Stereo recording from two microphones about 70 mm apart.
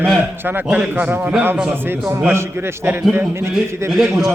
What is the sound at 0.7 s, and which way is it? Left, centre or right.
Speech, centre.